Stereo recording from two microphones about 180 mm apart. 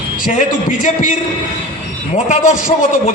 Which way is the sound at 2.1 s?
45° left (ahead or behind).